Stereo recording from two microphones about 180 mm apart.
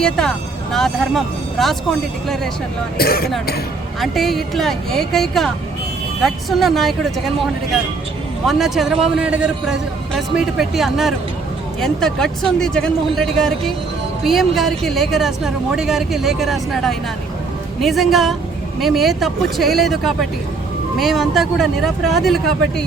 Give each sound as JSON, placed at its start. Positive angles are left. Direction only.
{"t": 0.0, "sound": "speech", "side_deg": 5}
{"t": 3.0, "sound": "speech", "side_deg": 55}
{"t": 4.0, "sound": "speech", "side_deg": 0}
{"t": 8.4, "sound": "speech", "side_deg": 0}